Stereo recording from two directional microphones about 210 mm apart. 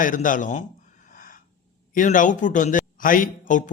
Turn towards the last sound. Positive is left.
turn(degrees=40)  # may be behind; listen again after turning